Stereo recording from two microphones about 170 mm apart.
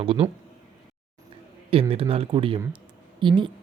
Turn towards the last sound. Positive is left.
turn(degrees=-30)  # may be behind; listen again after turning